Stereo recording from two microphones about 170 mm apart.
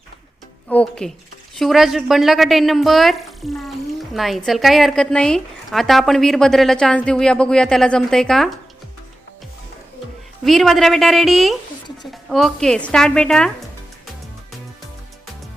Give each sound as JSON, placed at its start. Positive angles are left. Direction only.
{"t": 0.7, "sound": "a woman's voice", "side_deg": 5}
{"t": 10.4, "sound": "a woman's voice", "side_deg": 0}